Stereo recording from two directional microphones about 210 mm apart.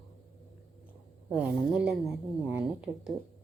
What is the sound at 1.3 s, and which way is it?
Speech, 5° right (ahead or behind).